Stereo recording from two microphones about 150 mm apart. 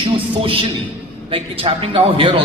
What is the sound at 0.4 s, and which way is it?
A man's voice, 35° right (ahead or behind).